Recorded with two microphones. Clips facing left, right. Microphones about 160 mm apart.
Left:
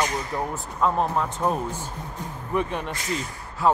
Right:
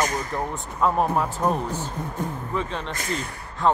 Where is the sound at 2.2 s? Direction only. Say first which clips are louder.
Right 8 dB; 55° right (ahead or behind).